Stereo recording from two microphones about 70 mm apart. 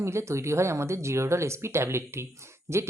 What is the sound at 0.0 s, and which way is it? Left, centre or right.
Speech, right.